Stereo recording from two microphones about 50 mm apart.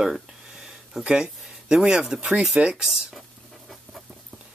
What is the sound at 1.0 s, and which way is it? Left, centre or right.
Speech, centre.